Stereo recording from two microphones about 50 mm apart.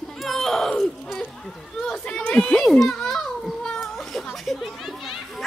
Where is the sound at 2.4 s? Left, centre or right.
Centre.